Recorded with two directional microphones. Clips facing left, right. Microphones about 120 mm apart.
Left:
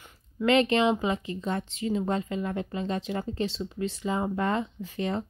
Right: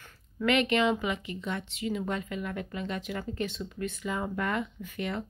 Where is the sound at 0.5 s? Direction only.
30° left (ahead or behind).